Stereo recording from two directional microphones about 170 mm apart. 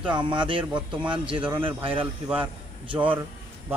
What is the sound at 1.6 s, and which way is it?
Speech, 30° right (ahead or behind).